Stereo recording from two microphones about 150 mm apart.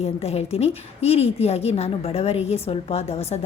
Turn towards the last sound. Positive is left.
turn(degrees=45)  # may be behind; listen again after turning